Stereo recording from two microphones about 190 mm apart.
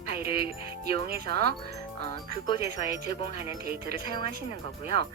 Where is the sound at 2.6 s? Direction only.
55° right (ahead or behind).